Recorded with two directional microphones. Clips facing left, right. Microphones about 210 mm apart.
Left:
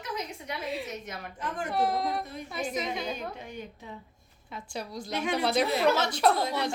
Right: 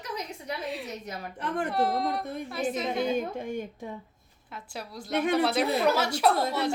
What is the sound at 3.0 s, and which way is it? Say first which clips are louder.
Speech: right 7 dB; 50° right (ahead or behind).